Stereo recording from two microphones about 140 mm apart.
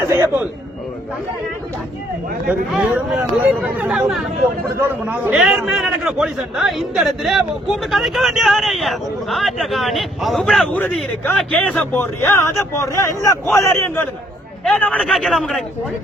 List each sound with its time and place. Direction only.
0.0 s speech: 15° right (ahead or behind)
2.5 s a man's voice: 10° right (ahead or behind)
11.8 s speech: 15° left (ahead or behind)
14.6 s a man's voice: 5° left (ahead or behind)